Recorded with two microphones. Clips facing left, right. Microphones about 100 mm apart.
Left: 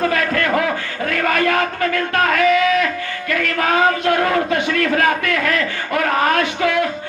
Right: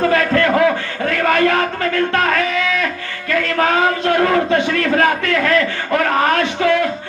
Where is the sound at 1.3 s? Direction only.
35° right (ahead or behind).